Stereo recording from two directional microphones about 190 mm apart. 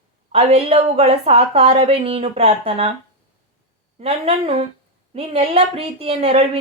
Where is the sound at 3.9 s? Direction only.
30° right (ahead or behind).